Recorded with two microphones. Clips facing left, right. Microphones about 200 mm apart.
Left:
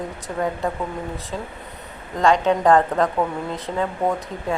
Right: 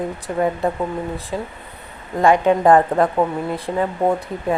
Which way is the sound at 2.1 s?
15° right (ahead or behind).